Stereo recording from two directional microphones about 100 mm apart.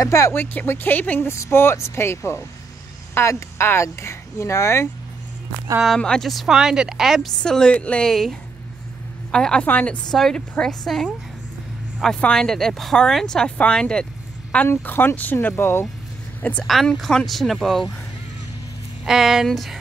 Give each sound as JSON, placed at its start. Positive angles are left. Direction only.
{"t": 0.0, "sound": "speech", "side_deg": 30}
{"t": 5.9, "sound": "speech", "side_deg": 10}
{"t": 7.4, "sound": "a woman's voice", "side_deg": 10}
{"t": 14.7, "sound": "speech", "side_deg": 20}
{"t": 16.6, "sound": "speech", "side_deg": 0}
{"t": 19.0, "sound": "speech", "side_deg": -5}